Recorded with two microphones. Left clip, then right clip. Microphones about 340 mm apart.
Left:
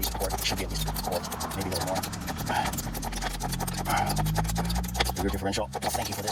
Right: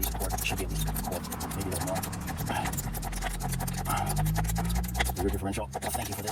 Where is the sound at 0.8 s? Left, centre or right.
Centre.